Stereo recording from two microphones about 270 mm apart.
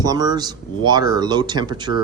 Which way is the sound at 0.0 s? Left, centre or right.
Centre.